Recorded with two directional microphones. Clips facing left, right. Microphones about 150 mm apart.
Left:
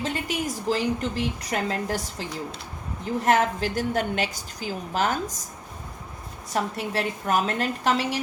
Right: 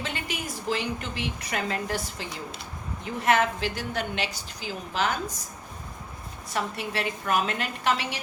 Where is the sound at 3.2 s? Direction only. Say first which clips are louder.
Left 1 dB; 40° left (ahead or behind).